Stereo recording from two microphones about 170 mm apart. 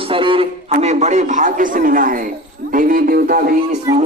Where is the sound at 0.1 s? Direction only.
30° right (ahead or behind); by 2.2 s 55° right (ahead or behind).